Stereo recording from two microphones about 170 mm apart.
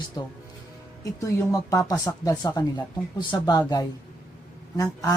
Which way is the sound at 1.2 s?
20° left (ahead or behind).